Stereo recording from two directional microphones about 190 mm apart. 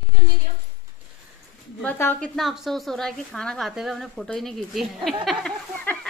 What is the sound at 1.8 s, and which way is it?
A woman's voice, 10° left (ahead or behind).